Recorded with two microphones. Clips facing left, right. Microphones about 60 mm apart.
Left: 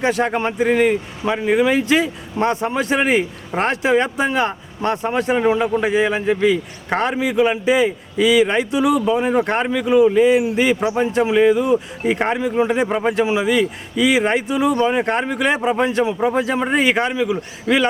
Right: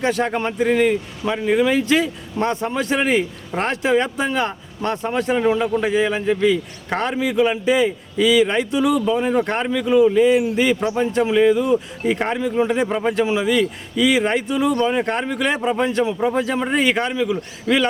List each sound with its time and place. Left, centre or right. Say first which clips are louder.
0.0 s a man's voice: left 2 dB; centre
1.8 s a man's voice: left 1 dB; centre